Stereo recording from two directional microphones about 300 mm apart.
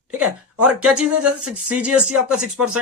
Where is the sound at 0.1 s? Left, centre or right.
Centre.